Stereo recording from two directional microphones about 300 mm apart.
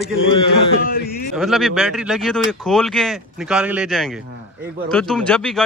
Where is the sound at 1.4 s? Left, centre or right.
Centre.